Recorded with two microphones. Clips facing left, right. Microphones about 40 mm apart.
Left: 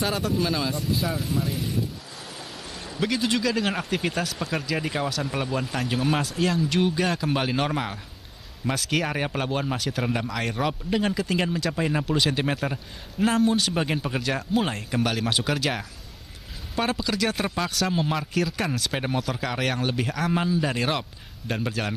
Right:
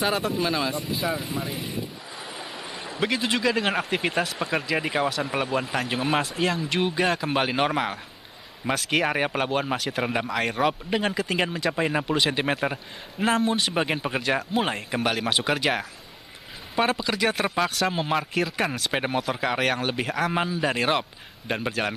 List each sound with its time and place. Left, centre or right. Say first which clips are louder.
0.0 s speech: right 1 dB; centre
3.0 s speech: even; centre
16.7 s speech: right 2 dB; centre